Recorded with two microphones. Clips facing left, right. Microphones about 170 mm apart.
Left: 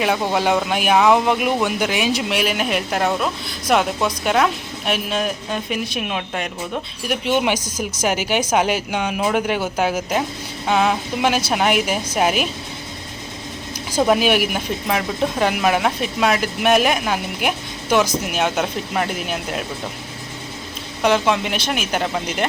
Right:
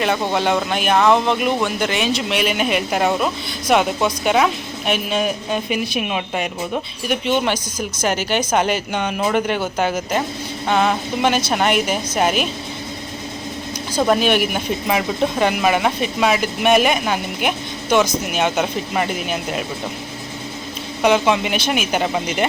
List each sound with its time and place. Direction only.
0.0 s speech: 5° left (ahead or behind)
7.0 s speech: 5° left (ahead or behind)
7.6 s speech: 40° left (ahead or behind)
8.0 s speech: 10° left (ahead or behind)
14.0 s speech: 5° left (ahead or behind)
21.0 s speech: centre (ahead or behind)